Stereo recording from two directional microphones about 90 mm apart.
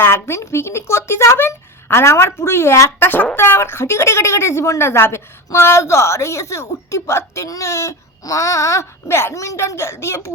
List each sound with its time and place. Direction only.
0.0 s speech: 30° left (ahead or behind)